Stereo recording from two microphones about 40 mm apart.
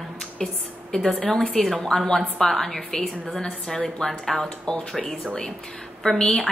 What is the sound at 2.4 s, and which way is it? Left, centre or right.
Speech, centre.